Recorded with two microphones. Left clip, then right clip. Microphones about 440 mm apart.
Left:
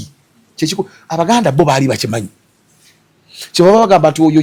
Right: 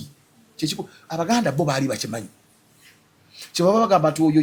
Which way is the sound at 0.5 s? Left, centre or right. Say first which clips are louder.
Left 10 dB; left.